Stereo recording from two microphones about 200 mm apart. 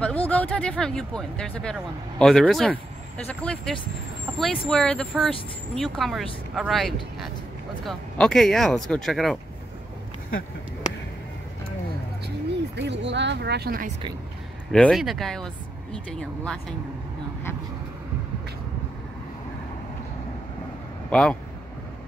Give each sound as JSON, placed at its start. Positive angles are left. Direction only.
{"t": 0.0, "sound": "speech", "side_deg": 5}
{"t": 12.7, "sound": "speech", "side_deg": -60}
{"t": 14.7, "sound": "speech", "side_deg": 0}
{"t": 21.1, "sound": "speech", "side_deg": 5}